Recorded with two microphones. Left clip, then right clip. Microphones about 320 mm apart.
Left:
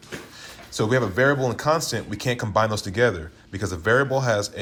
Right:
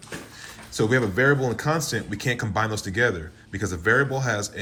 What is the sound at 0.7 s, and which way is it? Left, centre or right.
Speech, centre.